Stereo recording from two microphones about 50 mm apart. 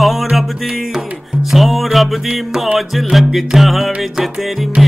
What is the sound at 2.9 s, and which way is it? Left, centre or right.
Speech, centre.